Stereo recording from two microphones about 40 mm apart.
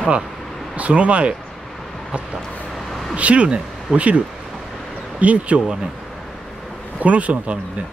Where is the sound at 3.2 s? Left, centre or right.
Right.